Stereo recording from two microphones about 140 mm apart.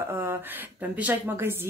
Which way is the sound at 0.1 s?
15° right (ahead or behind).